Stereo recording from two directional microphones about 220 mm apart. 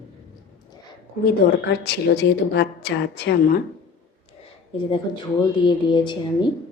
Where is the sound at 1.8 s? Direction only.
50° left (ahead or behind).